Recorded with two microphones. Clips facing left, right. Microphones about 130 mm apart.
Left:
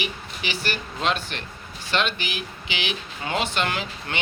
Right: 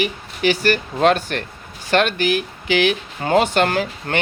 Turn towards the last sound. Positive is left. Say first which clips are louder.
# right 8 dB
turn(degrees=-50)  # may be behind; listen again after turning